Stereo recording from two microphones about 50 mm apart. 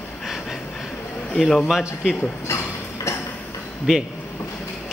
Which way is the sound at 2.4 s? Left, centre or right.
Left.